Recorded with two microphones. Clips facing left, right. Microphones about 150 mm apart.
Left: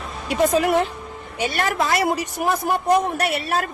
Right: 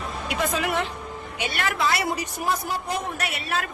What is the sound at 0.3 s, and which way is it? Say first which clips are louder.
A woman's voice: left 8 dB; 40° left (ahead or behind).